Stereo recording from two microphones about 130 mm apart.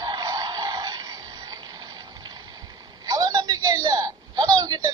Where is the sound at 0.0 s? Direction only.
30° right (ahead or behind).